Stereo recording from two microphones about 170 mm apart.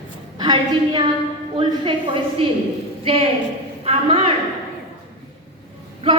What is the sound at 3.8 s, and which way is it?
Speech, 35° right (ahead or behind).